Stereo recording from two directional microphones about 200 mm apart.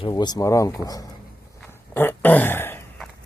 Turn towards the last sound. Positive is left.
turn(degrees=10)  # may be behind; listen again after turning